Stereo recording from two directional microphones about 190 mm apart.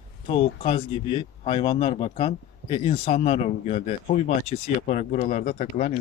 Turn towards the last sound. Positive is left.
turn(degrees=40)  # may be behind; listen again after turning